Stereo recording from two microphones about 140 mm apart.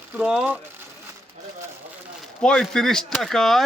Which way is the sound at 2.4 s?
5° left (ahead or behind).